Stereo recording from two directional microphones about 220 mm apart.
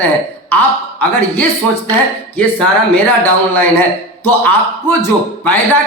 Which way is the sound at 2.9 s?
10° left (ahead or behind).